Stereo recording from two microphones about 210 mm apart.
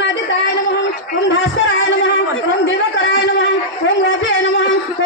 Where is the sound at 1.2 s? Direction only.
60° left (ahead or behind).